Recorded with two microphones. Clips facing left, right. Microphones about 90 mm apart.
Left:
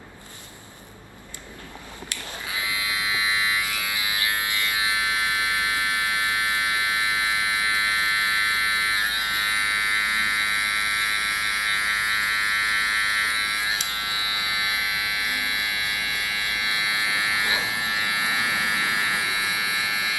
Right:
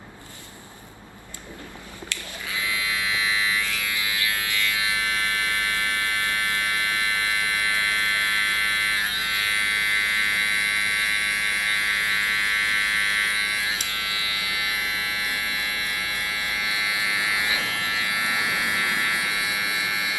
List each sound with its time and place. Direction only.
2.6 s electric shaver: 20° left (ahead or behind)